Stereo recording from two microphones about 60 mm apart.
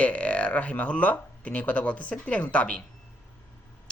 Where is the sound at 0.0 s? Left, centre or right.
Left.